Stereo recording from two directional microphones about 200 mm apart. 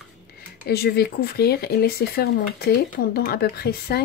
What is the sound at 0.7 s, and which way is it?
Speech, 50° left (ahead or behind).